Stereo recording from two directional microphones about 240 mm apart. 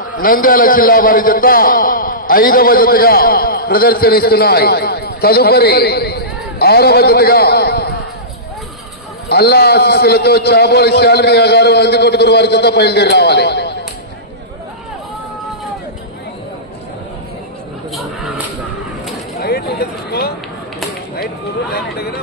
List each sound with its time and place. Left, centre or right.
0.0 s a man's voice: left
9.3 s a man's voice: left
19.4 s a sound: left
21.7 s hubbub: left